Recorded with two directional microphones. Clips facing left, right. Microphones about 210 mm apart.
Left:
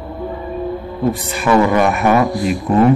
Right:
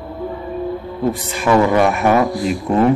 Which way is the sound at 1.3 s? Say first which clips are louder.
Even; 25° right (ahead or behind).